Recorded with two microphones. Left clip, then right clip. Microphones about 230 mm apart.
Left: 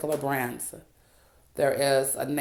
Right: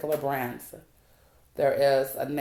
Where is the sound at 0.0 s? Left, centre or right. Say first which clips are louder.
Even; left.